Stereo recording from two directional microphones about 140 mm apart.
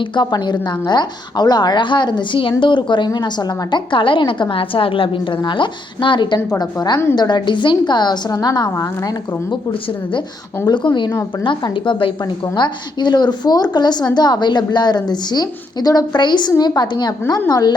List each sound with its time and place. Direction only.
0.2 s a woman's voice: 30° left (ahead or behind)
10.7 s a woman's voice: 35° left (ahead or behind)